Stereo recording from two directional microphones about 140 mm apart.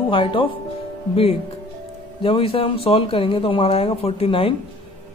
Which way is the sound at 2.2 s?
40° left (ahead or behind).